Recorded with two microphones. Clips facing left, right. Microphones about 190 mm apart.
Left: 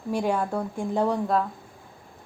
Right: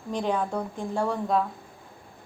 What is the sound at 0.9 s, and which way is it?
Speech, 15° left (ahead or behind).